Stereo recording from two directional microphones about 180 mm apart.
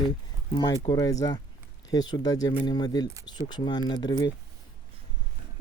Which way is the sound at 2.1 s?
20° left (ahead or behind).